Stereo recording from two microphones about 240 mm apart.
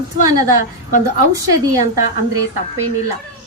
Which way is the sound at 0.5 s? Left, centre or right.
Left.